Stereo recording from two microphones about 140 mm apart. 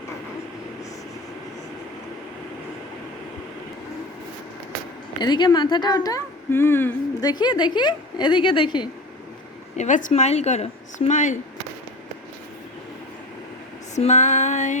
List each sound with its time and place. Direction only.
5.2 s a woman's voice: 30° left (ahead or behind)
7.3 s a woman's voice: 30° left (ahead or behind)
9.7 s speech: 60° left (ahead or behind)
13.9 s speech: 55° left (ahead or behind)